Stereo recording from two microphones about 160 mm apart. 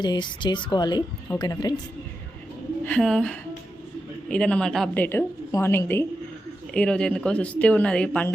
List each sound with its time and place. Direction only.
0.0 s a woman's voice: 30° left (ahead or behind)
2.8 s a woman's voice: 5° left (ahead or behind)
5.0 s speech: 15° left (ahead or behind)